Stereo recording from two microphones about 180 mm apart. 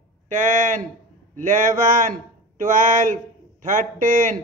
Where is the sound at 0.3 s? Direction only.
45° right (ahead or behind).